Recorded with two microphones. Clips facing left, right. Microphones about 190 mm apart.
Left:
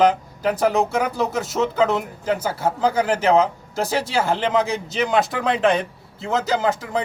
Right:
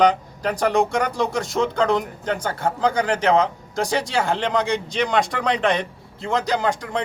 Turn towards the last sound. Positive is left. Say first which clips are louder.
# left 1 dB
turn(degrees=5)  # may be behind; listen again after turning